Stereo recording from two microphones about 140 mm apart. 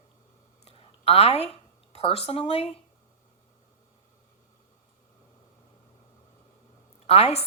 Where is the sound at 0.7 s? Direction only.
45° left (ahead or behind).